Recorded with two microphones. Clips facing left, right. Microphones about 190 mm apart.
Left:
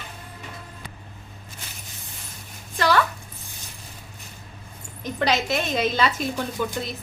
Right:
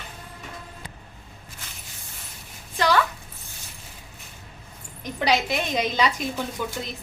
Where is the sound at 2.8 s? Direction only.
15° right (ahead or behind).